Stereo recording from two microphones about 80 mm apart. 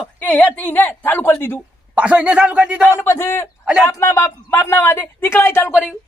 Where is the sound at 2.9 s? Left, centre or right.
Left.